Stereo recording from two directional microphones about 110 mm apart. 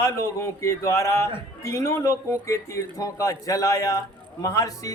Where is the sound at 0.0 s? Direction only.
25° left (ahead or behind).